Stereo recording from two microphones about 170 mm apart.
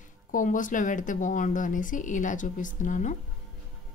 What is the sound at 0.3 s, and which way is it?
Speech, 50° left (ahead or behind).